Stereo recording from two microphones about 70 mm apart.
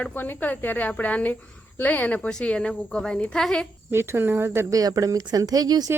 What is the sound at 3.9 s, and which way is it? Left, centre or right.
Speech, right.